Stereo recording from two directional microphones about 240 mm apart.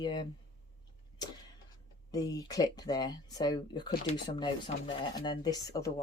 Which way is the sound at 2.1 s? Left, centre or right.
Centre.